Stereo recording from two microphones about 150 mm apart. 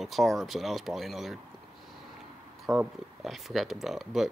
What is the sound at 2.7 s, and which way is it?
Speech, 20° right (ahead or behind).